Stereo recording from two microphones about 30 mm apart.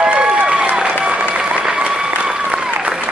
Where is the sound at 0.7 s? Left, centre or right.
Right.